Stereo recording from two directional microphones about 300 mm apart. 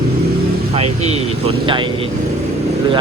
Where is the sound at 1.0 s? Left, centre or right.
Right.